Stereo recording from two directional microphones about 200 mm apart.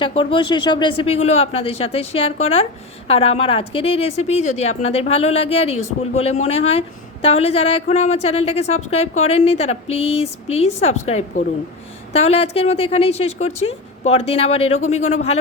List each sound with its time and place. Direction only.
0.0 s a woman's voice: 25° left (ahead or behind)